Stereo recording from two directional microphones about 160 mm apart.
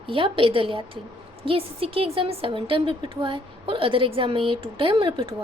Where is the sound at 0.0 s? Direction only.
35° right (ahead or behind).